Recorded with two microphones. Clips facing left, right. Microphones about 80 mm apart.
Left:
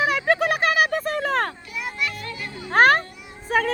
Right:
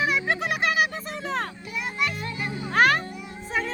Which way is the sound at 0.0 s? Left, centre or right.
Left.